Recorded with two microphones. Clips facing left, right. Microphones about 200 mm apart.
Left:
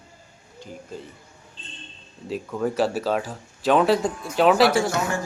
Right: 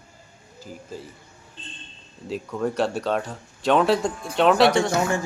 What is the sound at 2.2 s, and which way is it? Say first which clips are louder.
Speech: even; centre (ahead or behind).